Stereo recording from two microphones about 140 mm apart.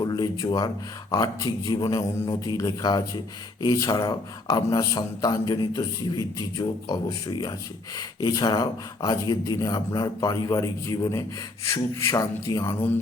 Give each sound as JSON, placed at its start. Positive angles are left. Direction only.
{"t": 0.0, "sound": "speech", "side_deg": 25}